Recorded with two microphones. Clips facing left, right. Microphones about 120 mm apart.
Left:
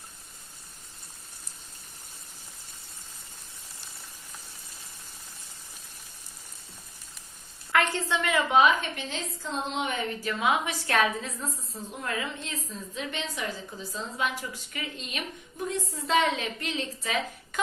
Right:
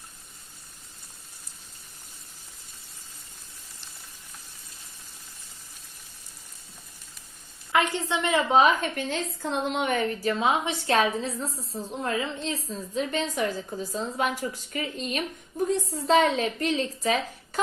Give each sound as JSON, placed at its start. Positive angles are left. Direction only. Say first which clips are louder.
{"t": 7.7, "sound": "a woman's voice", "louder": "right 1 dB", "side_deg": -15}
{"t": 10.2, "sound": "a woman's voice", "louder": "right 1 dB", "side_deg": -25}